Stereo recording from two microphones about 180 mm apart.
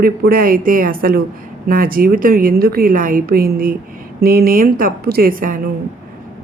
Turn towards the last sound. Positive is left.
turn(degrees=-50)  # may be behind; listen again after turning